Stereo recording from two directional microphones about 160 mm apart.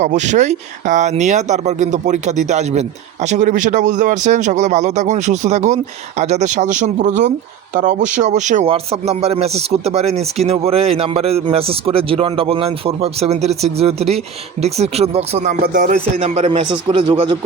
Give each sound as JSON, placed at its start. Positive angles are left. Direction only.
{"t": 0.0, "sound": "speech", "side_deg": -50}
{"t": 8.6, "sound": "speech", "side_deg": -40}
{"t": 15.6, "sound": "speech", "side_deg": -55}
{"t": 16.2, "sound": "speech", "side_deg": -40}